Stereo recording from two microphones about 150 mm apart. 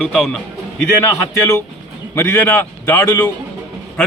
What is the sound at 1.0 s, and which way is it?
A man's voice, 20° left (ahead or behind).